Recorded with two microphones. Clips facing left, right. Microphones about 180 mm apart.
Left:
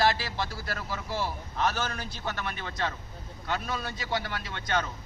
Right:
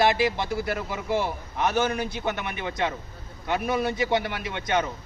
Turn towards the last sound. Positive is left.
turn(degrees=-20)  # may be behind; listen again after turning